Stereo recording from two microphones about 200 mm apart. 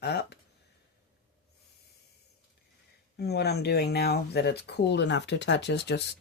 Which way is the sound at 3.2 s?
55° left (ahead or behind).